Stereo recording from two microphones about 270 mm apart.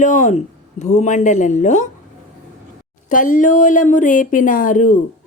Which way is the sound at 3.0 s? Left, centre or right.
Left.